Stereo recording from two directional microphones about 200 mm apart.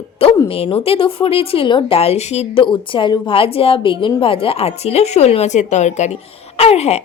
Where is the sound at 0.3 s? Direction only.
30° left (ahead or behind).